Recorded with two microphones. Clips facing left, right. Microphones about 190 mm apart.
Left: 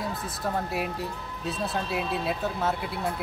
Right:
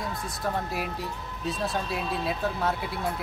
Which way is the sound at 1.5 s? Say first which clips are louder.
Even; centre (ahead or behind).